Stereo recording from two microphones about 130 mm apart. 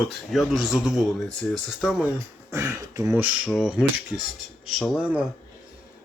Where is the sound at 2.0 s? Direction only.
20° right (ahead or behind).